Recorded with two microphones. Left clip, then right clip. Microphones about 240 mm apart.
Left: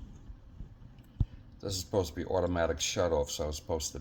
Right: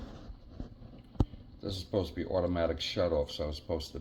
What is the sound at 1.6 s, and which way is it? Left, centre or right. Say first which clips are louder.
Speech: left 2 dB; left.